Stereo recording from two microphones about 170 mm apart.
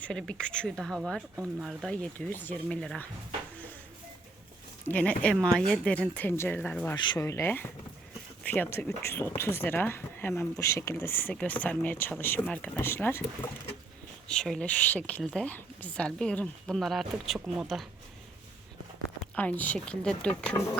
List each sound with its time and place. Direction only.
0.0 s speech: 5° left (ahead or behind)
4.9 s speech: 10° left (ahead or behind)
6.9 s speech: 25° left (ahead or behind); by 17.8 s centre (ahead or behind)
19.4 s speech: 10° left (ahead or behind)